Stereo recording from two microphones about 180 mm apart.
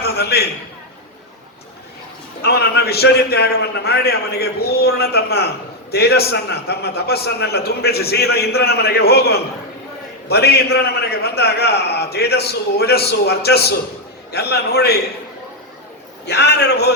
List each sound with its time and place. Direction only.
0.0 s a sound: 60° left (ahead or behind)
2.4 s a man's voice: 65° left (ahead or behind)
16.2 s a man's voice: 70° left (ahead or behind)